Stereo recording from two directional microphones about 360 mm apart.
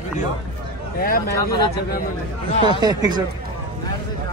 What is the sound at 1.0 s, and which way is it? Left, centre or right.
Speech, left.